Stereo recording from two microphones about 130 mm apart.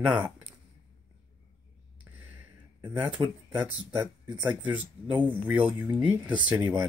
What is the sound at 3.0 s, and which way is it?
Speech, 10° right (ahead or behind).